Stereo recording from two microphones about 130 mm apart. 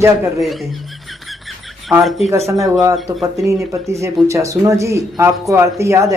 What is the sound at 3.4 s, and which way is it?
Speech, 20° right (ahead or behind).